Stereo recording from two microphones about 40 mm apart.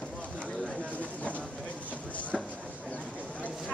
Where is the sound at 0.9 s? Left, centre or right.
Left.